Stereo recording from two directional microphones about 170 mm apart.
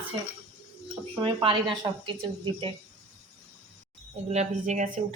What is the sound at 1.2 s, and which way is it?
Speech, 30° right (ahead or behind).